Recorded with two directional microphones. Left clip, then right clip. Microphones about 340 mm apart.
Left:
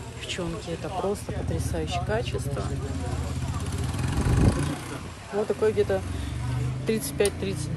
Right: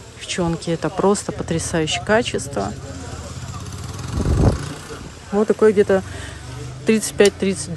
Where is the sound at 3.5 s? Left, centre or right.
Left.